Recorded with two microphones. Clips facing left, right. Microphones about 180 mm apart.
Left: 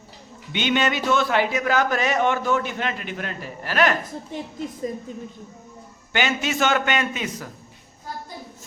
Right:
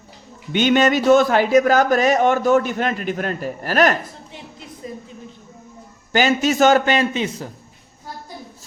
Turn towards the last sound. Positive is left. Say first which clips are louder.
# right 6 dB
turn(degrees=-30)  # may be behind; listen again after turning